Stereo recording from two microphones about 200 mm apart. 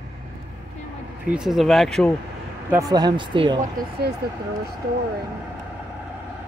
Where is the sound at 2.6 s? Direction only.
15° right (ahead or behind).